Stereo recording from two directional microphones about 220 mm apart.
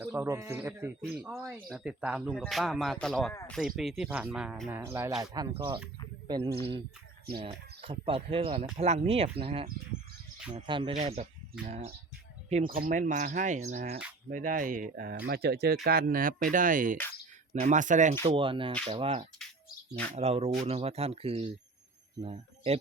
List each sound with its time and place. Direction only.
0.0 s speech: 10° right (ahead or behind); by 18.1 s 35° right (ahead or behind)
18.1 s speech: 25° right (ahead or behind)